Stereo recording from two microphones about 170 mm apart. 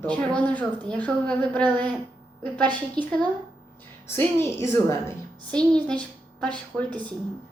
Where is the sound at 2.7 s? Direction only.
25° right (ahead or behind).